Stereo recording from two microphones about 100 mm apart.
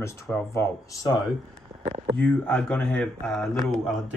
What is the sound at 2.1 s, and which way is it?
Speech, 10° left (ahead or behind).